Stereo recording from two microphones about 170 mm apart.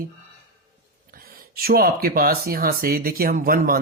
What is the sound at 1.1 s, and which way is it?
Speech, 60° right (ahead or behind).